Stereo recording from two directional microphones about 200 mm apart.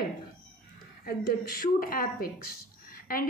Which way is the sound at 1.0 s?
50° left (ahead or behind).